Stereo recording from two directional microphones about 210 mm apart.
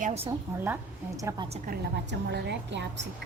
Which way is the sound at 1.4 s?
30° right (ahead or behind).